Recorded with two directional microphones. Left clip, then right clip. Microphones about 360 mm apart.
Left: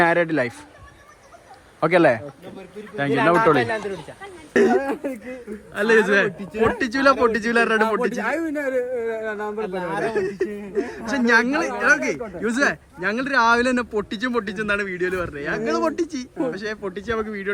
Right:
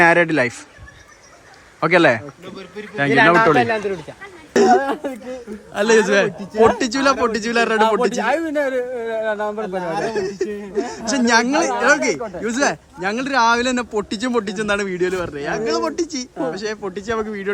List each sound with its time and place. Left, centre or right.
0.0 s speech: centre
1.8 s speech: centre
3.6 s speech: right
4.5 s speech: centre
9.6 s speech: centre
10.0 s speech: centre